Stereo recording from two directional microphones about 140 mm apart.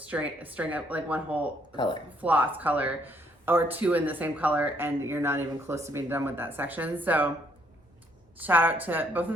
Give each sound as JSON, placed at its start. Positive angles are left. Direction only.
{"t": 0.0, "sound": "speech", "side_deg": -10}
{"t": 1.7, "sound": "speech", "side_deg": 35}
{"t": 2.2, "sound": "speech", "side_deg": -10}
{"t": 8.4, "sound": "speech", "side_deg": -15}